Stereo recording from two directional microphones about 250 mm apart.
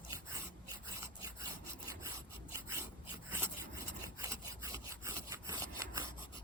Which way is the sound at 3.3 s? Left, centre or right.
Centre.